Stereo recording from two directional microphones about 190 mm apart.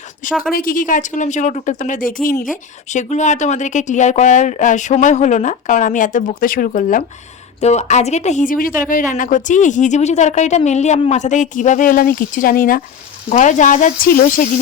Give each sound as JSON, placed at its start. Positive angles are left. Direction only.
{"t": 0.5, "sound": "a woman's voice", "side_deg": 45}